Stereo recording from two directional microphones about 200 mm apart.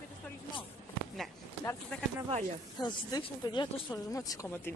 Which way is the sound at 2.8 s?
20° left (ahead or behind).